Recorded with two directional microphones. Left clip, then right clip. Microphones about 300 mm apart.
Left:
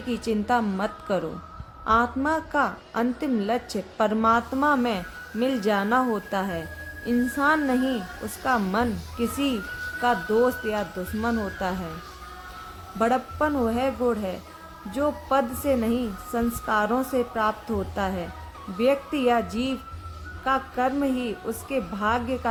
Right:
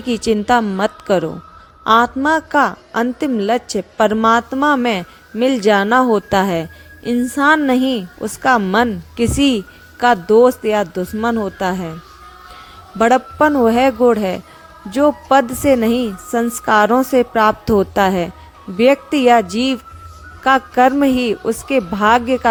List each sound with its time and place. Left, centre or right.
0.1 s a woman's voice: right
13.0 s a woman's voice: right